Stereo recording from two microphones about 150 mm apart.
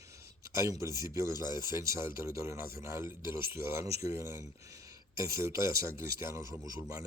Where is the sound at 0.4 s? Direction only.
20° right (ahead or behind).